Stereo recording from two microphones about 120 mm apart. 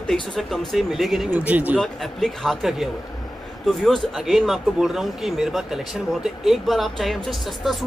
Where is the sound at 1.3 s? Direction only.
15° right (ahead or behind).